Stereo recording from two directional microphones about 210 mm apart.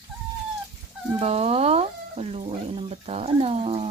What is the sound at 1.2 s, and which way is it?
Speech, 30° right (ahead or behind).